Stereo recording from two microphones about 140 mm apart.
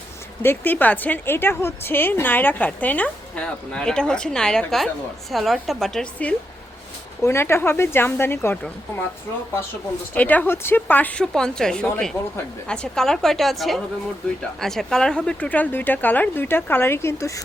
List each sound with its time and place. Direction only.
0.4 s a woman's voice: 15° left (ahead or behind)
7.2 s a woman's voice: 20° left (ahead or behind)
10.2 s a woman's voice: 10° left (ahead or behind)